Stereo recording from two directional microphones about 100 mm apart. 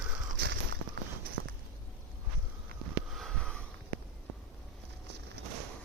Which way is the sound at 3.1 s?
Centre (ahead or behind).